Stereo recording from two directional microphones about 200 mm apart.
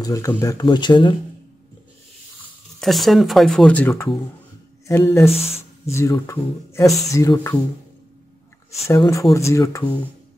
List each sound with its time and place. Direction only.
0.0 s speech: 15° left (ahead or behind)
2.8 s speech: centre (ahead or behind); by 7.5 s 15° left (ahead or behind)
8.8 s speech: 15° left (ahead or behind)